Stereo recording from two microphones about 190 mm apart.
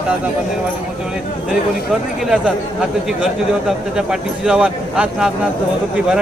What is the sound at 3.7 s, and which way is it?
Speech, 5° right (ahead or behind).